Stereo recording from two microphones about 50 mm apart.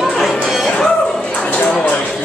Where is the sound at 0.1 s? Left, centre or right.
Centre.